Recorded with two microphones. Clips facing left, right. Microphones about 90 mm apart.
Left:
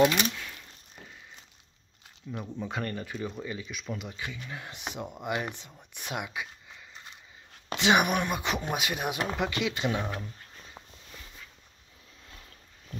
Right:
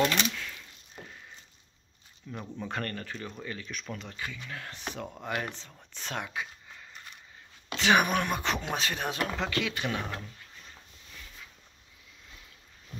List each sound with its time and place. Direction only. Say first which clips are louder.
0.0 s a sound: left 4 dB; 10° left (ahead or behind)
2.3 s speech: left 1 dB; 5° left (ahead or behind)
7.7 s speech: left 1 dB; 20° left (ahead or behind)